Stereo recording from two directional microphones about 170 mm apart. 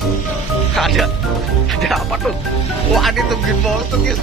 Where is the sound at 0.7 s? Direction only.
Centre (ahead or behind).